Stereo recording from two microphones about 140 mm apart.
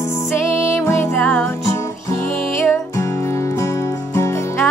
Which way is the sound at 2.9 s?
20° left (ahead or behind).